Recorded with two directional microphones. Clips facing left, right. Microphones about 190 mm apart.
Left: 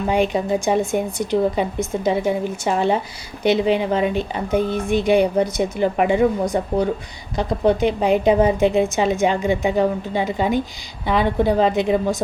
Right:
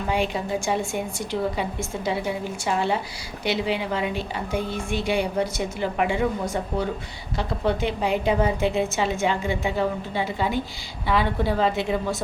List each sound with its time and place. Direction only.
0.1 s a woman's voice: 20° left (ahead or behind)